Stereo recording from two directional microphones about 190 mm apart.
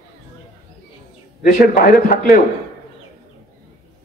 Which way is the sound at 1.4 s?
45° left (ahead or behind).